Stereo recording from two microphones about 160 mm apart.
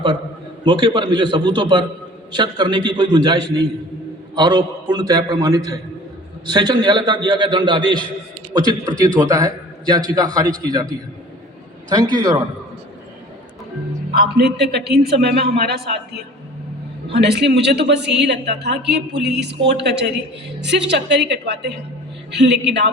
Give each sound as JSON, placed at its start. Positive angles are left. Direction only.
{"t": 0.6, "sound": "a man's voice", "side_deg": -30}
{"t": 11.9, "sound": "a man's voice", "side_deg": -25}
{"t": 14.1, "sound": "a man's voice", "side_deg": -85}